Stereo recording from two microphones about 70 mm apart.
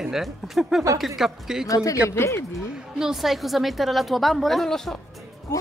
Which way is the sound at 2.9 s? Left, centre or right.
Centre.